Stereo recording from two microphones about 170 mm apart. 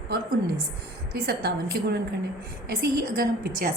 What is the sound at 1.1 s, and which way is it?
A woman's voice, 65° right (ahead or behind).